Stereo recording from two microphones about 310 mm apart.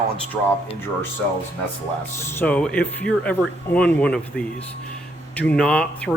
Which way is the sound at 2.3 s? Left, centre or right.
Centre.